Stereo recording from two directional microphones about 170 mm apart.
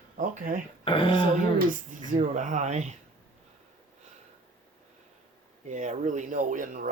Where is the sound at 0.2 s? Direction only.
50° right (ahead or behind).